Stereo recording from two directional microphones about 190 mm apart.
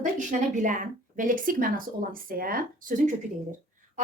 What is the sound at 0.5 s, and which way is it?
Speech, 40° right (ahead or behind).